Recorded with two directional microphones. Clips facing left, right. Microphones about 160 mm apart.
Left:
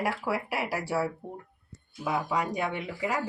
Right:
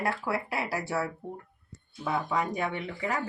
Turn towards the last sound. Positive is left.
turn(degrees=10)  # may be behind; listen again after turning